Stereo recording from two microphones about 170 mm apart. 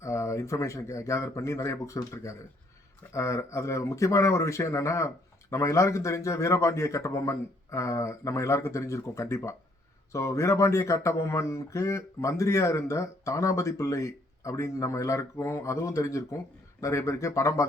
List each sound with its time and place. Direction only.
0.0 s speech: 15° left (ahead or behind)